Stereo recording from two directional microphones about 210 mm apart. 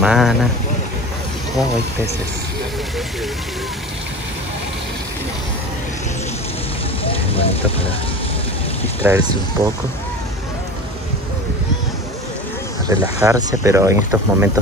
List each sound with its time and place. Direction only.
0.0 s speech: centre (ahead or behind)
7.1 s speech: 25° left (ahead or behind)
9.0 s speech: 15° right (ahead or behind)
12.9 s speech: 15° right (ahead or behind)